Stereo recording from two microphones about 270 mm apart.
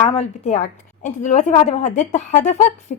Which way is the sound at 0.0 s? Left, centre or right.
Left.